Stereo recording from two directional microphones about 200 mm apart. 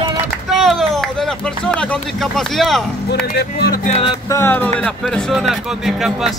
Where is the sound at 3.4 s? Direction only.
50° left (ahead or behind).